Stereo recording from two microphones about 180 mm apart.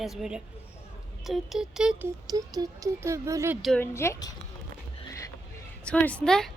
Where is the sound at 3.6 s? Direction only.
5° left (ahead or behind).